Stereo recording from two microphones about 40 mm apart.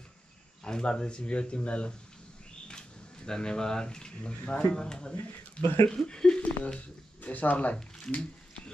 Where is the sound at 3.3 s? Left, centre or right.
Centre.